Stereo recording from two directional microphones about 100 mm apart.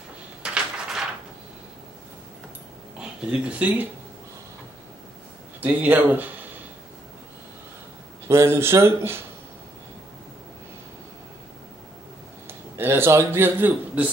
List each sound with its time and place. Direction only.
0.4 s a sound: 5° right (ahead or behind)
3.0 s speech: 10° right (ahead or behind)
5.6 s speech: 15° right (ahead or behind)
8.3 s speech: 25° right (ahead or behind)
12.4 s a man's voice: 25° right (ahead or behind)